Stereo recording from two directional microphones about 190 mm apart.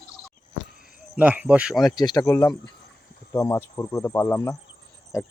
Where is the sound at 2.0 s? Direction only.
20° left (ahead or behind).